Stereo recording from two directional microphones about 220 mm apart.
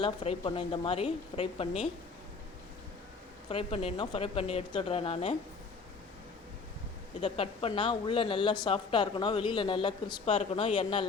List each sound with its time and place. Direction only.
0.0 s a woman's voice: 25° left (ahead or behind)
3.5 s a woman's voice: 25° left (ahead or behind)
7.2 s a woman's voice: 25° left (ahead or behind)